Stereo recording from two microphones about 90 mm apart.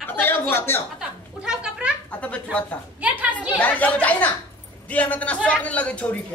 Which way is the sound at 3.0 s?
15° right (ahead or behind).